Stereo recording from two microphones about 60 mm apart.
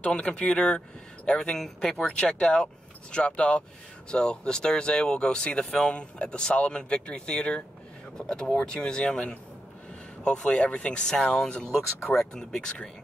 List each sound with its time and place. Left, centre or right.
0.0 s speech: centre